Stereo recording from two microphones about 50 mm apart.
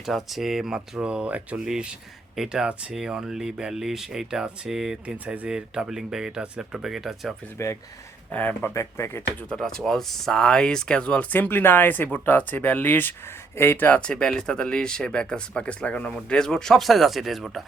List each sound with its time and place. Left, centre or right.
0.0 s speech: centre
0.9 s speech: right
1.5 s speech: centre
5.0 s speech: right
5.5 s speech: centre
6.8 s speech: centre
7.6 s speech: left
8.3 s speech: left
8.7 s speech: left
9.6 s speech: centre
11.3 s speech: left
14.0 s speech: centre